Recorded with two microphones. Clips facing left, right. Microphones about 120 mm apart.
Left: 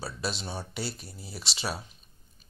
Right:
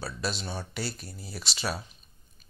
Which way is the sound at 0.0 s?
25° left (ahead or behind).